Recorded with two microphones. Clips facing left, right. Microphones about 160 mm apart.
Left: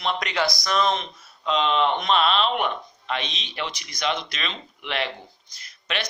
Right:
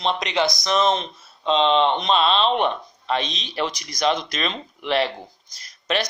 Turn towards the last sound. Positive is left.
turn(degrees=-40)  # may be behind; listen again after turning